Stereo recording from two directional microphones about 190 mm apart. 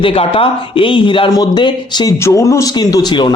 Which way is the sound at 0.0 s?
30° left (ahead or behind).